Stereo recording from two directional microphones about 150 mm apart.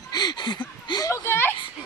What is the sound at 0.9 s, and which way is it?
Speech, 25° left (ahead or behind).